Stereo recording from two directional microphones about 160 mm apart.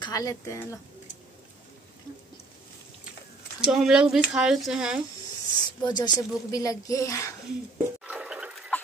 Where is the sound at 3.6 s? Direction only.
5° right (ahead or behind).